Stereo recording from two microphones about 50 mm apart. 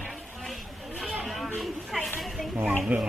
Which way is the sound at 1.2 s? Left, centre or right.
Centre.